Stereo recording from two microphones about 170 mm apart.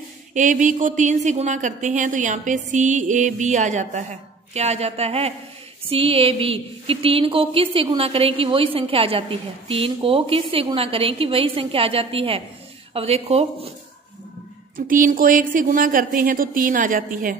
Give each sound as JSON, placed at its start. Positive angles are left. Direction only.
{"t": 0.3, "sound": "a woman's voice", "side_deg": -45}
{"t": 14.9, "sound": "a woman's voice", "side_deg": -55}